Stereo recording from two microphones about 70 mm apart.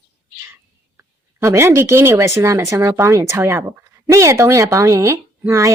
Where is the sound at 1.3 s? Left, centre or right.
Right.